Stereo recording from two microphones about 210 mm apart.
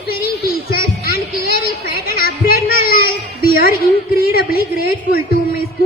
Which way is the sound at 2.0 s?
45° left (ahead or behind).